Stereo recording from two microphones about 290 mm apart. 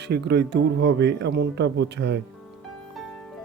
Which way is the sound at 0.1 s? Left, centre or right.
Right.